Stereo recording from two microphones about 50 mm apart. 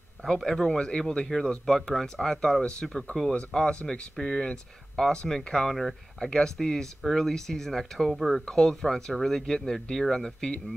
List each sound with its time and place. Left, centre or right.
0.4 s speech: centre
5.8 s speech: centre
8.5 s speech: centre